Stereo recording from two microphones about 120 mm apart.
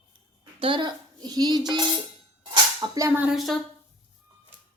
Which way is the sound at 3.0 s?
25° right (ahead or behind).